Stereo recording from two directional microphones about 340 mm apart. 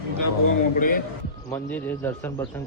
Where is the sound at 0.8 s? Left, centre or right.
Left.